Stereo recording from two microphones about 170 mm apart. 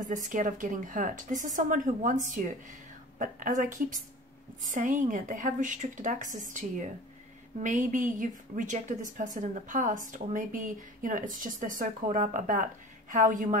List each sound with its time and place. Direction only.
0.0 s a woman's voice: 50° right (ahead or behind)